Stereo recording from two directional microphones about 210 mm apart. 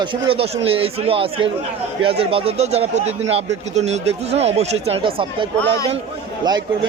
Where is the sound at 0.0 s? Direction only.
25° right (ahead or behind).